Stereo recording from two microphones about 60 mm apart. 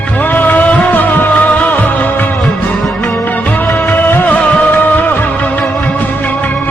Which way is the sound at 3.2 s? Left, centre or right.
Left.